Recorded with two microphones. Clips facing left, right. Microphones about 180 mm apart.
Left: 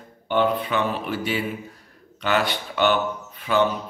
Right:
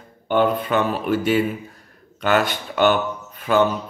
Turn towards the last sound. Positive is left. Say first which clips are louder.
# right 3 dB
turn(degrees=-45)  # may be behind; listen again after turning